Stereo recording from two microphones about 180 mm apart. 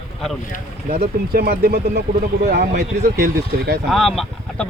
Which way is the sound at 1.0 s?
60° right (ahead or behind).